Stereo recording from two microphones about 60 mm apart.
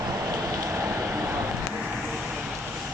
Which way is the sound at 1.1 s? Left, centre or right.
Right.